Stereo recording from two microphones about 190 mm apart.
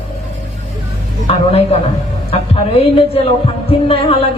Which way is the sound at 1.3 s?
30° left (ahead or behind).